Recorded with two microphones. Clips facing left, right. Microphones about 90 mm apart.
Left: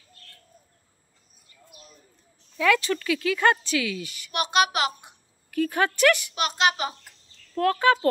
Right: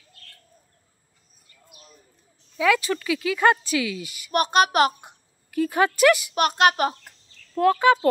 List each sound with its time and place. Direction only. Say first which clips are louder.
2.5 s speech: right 1 dB; 10° right (ahead or behind)
4.3 s a child's voice: right 4 dB; 40° right (ahead or behind)
5.5 s speech: right 3 dB; 15° right (ahead or behind)
6.3 s a child's voice: right 5 dB; 50° right (ahead or behind)
7.5 s speech: right 3 dB; 10° right (ahead or behind)